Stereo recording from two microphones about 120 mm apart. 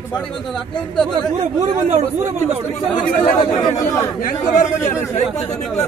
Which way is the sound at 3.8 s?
25° left (ahead or behind).